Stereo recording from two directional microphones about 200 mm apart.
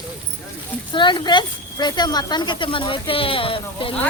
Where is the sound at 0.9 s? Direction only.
25° left (ahead or behind).